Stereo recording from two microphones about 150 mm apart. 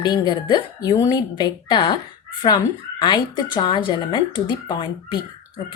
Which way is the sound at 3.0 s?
30° left (ahead or behind).